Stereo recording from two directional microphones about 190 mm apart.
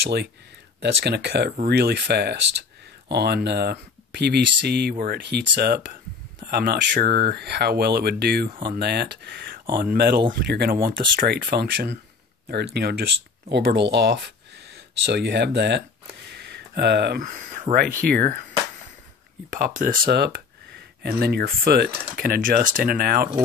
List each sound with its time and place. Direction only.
0.0 s speech: 60° right (ahead or behind)
19.5 s speech: 45° right (ahead or behind)
20.1 s speech: 60° right (ahead or behind)